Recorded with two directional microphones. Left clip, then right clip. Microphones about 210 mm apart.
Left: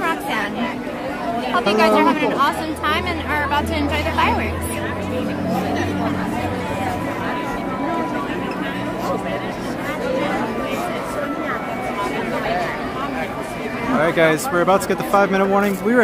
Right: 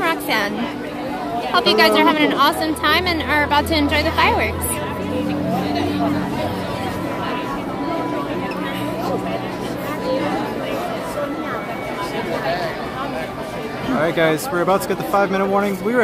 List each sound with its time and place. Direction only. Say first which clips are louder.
0.0 s chatter: right 2 dB; 35° right (ahead or behind)
1.5 s speech: right 2 dB; 40° right (ahead or behind)
13.9 s speech: left 1 dB; 5° left (ahead or behind)